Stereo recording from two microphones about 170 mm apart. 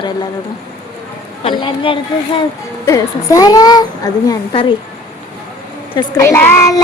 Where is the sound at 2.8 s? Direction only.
20° left (ahead or behind).